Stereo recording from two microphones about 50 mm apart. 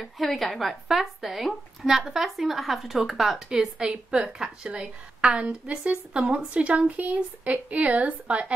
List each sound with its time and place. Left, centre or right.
0.0 s a woman's voice: centre; by 8.5 s right